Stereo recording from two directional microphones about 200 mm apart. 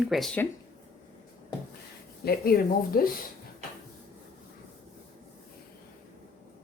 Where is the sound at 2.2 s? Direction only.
45° left (ahead or behind).